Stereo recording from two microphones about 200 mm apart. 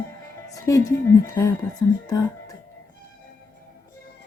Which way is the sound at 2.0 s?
15° left (ahead or behind).